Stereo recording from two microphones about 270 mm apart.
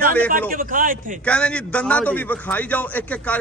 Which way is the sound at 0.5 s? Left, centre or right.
Right.